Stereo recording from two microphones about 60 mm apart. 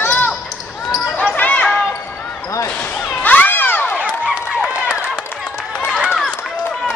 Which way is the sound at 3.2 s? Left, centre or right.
Left.